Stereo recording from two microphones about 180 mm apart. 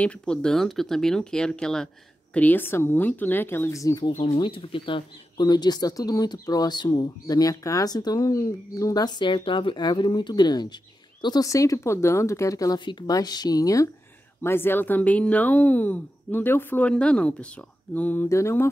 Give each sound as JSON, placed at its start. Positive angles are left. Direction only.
{"t": 0.0, "sound": "speech", "side_deg": 5}
{"t": 4.1, "sound": "speech", "side_deg": 35}